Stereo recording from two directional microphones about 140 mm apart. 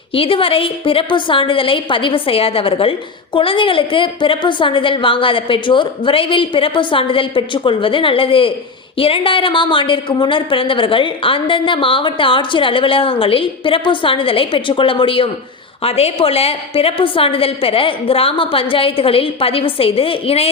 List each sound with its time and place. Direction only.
0.1 s a woman's voice: 40° left (ahead or behind)